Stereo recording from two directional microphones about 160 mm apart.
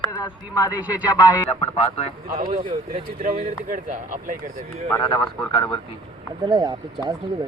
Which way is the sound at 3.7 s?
55° right (ahead or behind).